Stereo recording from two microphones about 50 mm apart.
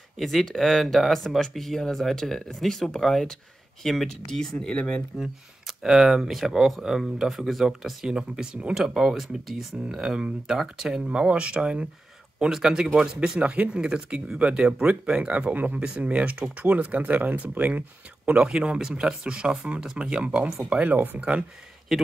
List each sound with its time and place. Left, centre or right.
0.2 s speech: centre; by 5.0 s left
5.1 s speech: centre
8.7 s speech: centre
13.4 s speech: right
18.3 s speech: centre
20.9 s speech: right
21.2 s speech: right